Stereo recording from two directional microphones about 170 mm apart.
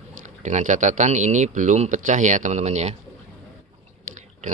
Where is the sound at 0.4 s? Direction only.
45° right (ahead or behind).